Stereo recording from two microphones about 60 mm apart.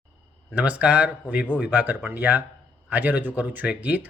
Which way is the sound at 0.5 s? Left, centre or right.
Right.